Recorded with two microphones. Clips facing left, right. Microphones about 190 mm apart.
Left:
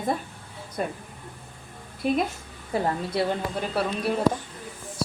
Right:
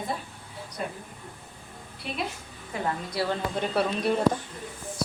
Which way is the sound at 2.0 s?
45° left (ahead or behind).